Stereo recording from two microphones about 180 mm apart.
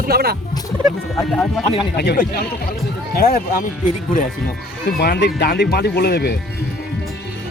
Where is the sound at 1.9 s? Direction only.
65° left (ahead or behind).